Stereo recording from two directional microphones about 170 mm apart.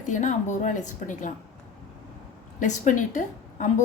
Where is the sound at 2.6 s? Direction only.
45° left (ahead or behind).